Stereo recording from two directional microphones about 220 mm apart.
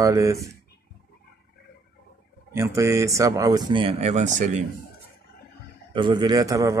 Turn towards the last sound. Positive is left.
turn(degrees=-15)  # may be behind; listen again after turning